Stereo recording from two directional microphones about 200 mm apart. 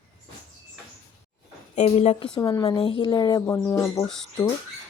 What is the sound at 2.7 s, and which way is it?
Speech, 30° left (ahead or behind).